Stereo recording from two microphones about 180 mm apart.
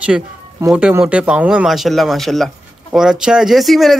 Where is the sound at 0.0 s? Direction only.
5° right (ahead or behind).